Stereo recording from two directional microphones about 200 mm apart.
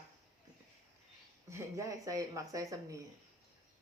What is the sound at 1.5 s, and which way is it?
A woman's voice, 15° right (ahead or behind).